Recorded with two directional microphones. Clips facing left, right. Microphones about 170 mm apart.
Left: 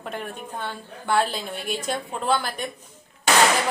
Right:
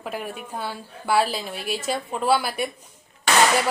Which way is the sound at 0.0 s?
5° right (ahead or behind).